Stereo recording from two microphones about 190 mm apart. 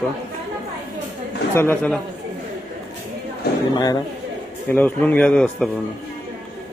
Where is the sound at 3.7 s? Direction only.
20° left (ahead or behind).